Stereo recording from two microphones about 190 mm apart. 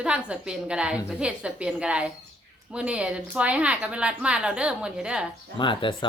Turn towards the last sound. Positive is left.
turn(degrees=25)  # may be behind; listen again after turning